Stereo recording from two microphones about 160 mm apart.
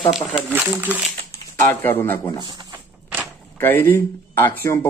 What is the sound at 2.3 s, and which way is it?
Speech, 25° right (ahead or behind).